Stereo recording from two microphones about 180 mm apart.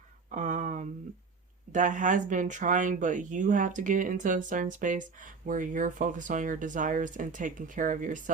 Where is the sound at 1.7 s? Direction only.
45° right (ahead or behind).